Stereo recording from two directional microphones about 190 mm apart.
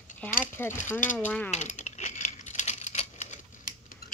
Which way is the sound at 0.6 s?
10° left (ahead or behind).